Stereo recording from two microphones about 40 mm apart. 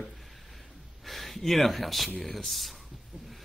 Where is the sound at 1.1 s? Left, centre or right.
Centre.